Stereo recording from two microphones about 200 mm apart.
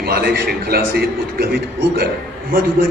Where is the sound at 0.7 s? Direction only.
50° right (ahead or behind).